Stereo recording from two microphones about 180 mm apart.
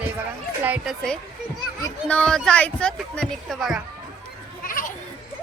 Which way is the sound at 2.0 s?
5° left (ahead or behind).